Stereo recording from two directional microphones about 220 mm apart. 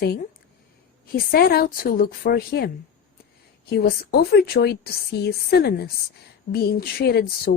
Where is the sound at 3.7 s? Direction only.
45° left (ahead or behind).